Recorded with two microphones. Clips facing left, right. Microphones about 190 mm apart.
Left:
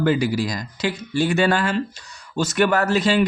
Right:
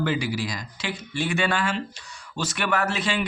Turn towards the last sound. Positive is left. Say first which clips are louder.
# left 7 dB
turn(degrees=40)  # may be behind; listen again after turning